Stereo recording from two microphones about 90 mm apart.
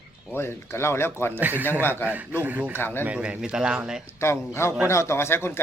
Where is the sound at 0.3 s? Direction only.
25° left (ahead or behind).